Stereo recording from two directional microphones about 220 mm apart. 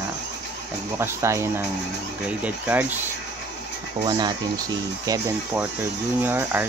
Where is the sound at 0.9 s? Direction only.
10° right (ahead or behind).